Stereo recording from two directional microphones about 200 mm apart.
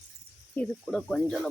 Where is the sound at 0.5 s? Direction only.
5° left (ahead or behind).